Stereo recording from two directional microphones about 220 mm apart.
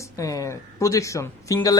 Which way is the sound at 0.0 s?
15° left (ahead or behind).